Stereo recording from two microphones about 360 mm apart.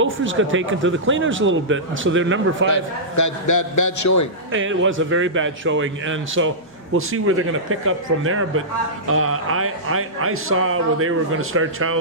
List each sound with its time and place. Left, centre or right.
0.0 s a man's voice: right
2.6 s a man's voice: left
4.5 s a man's voice: right